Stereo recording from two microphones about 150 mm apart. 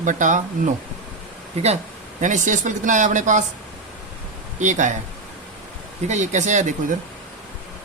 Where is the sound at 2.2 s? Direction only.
55° right (ahead or behind).